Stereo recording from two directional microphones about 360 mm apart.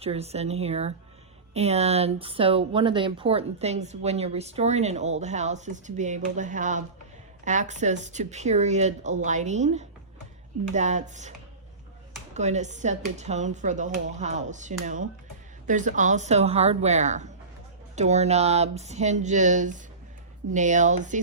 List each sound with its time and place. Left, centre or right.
0.0 s speech: centre